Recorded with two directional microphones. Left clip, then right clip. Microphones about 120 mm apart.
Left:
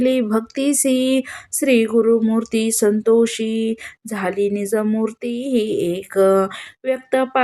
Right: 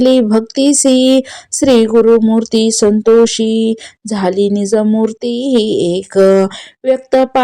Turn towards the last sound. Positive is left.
turn(degrees=-50)  # may be behind; listen again after turning